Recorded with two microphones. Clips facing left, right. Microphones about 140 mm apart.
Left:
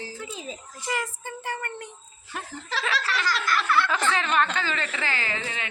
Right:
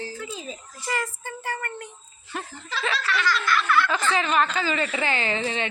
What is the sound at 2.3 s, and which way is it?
Speech, centre (ahead or behind).